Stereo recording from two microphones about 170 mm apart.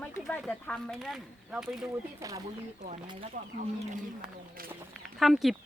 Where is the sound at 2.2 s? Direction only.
20° right (ahead or behind).